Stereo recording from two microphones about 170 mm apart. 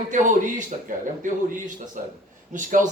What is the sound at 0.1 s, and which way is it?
Speech, 45° right (ahead or behind).